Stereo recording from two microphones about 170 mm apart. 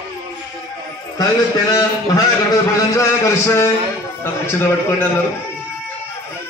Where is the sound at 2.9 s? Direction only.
15° left (ahead or behind).